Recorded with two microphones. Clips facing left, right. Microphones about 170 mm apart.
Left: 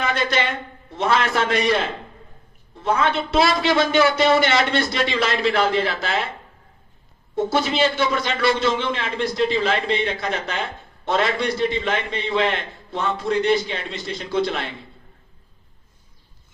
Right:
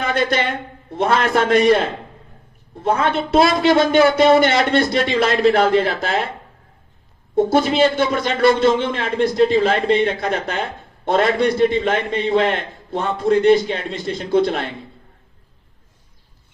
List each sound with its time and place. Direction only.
0.0 s a man's voice: 55° right (ahead or behind)
7.3 s a man's voice: 50° right (ahead or behind)